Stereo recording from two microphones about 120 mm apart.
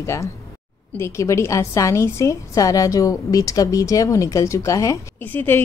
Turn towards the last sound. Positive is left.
turn(degrees=15)  # may be behind; listen again after turning